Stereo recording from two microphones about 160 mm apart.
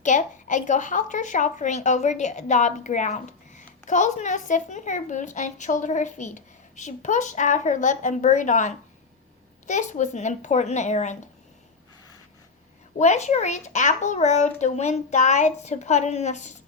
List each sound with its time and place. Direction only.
0.0 s a woman's voice: 50° left (ahead or behind)
13.0 s a woman's voice: 45° left (ahead or behind)